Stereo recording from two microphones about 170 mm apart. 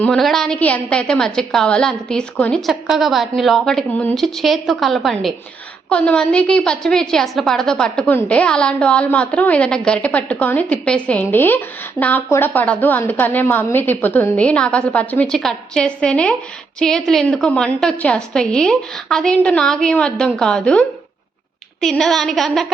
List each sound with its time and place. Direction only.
0.0 s a woman's voice: centre (ahead or behind)